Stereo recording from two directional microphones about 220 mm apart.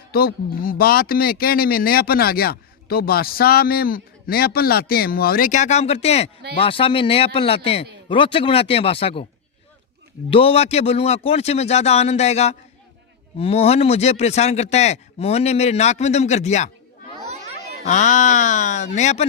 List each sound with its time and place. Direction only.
0.1 s speech: 45° left (ahead or behind); by 9.2 s 25° left (ahead or behind)
10.2 s speech: 25° left (ahead or behind)
17.8 s speech: 35° left (ahead or behind)